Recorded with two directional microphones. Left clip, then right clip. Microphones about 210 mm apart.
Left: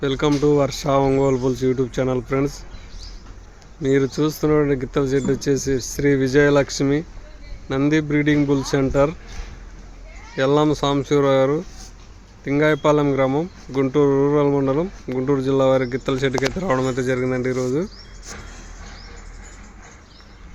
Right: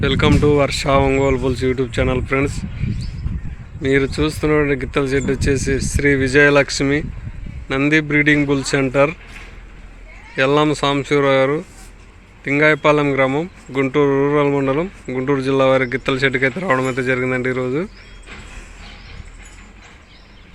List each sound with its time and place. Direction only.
0.0 s speech: 5° left (ahead or behind)
3.8 s speech: 10° left (ahead or behind)
10.3 s speech: 5° left (ahead or behind)